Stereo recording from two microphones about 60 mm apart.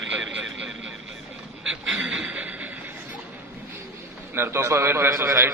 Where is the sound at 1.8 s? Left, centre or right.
Centre.